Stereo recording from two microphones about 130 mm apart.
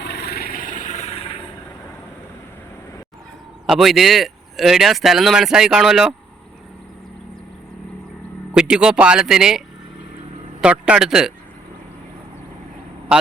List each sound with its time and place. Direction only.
0.5 s vehicle: 85° left; by 1.2 s 55° left (ahead or behind)
3.7 s speech: centre (ahead or behind)
8.5 s speech: 5° right (ahead or behind)
13.1 s vehicle: 10° right (ahead or behind)